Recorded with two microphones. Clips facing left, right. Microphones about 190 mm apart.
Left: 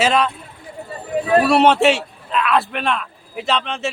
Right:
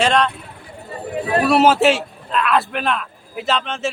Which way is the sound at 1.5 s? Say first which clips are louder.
Right 3 dB; 5° right (ahead or behind).